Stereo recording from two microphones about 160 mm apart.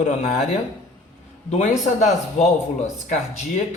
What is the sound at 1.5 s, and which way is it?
Speech, 50° left (ahead or behind).